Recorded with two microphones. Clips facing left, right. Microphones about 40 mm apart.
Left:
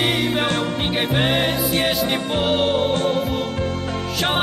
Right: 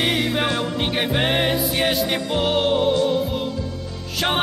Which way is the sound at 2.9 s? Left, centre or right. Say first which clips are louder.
Right 1 dB; left.